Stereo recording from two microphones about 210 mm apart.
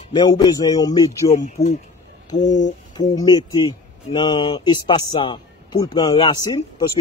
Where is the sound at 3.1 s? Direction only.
20° left (ahead or behind).